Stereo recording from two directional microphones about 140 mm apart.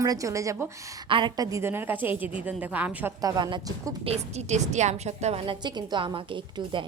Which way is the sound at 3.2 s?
25° right (ahead or behind).